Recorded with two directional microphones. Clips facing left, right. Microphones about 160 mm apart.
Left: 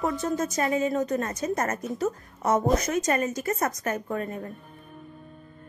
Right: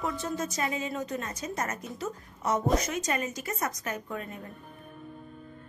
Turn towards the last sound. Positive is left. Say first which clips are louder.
# left 6 dB
turn(degrees=45)  # may be behind; listen again after turning